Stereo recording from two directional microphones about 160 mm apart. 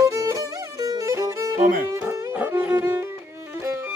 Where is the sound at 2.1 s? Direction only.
15° right (ahead or behind).